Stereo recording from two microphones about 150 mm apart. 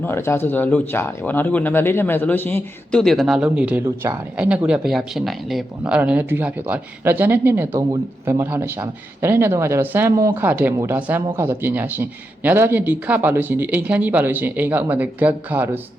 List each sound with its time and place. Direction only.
0.0 s speech: 15° left (ahead or behind)
3.0 s speech: centre (ahead or behind)
3.8 s speech: 20° right (ahead or behind)
4.4 s speech: 10° right (ahead or behind)